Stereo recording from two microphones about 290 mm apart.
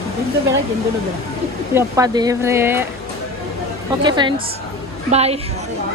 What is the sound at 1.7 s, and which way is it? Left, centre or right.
Speech, centre.